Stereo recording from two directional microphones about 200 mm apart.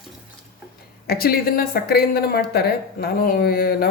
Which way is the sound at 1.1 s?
50° left (ahead or behind).